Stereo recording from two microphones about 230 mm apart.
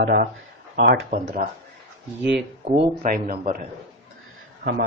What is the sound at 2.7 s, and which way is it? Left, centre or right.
Speech, right.